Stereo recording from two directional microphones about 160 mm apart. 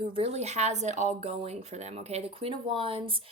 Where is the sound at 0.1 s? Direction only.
40° right (ahead or behind).